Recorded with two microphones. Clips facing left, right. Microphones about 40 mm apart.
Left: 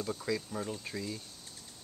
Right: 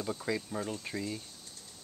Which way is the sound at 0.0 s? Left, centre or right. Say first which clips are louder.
Even; centre.